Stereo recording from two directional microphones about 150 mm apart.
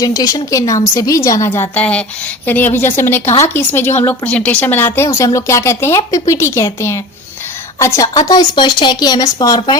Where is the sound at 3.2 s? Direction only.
50° left (ahead or behind).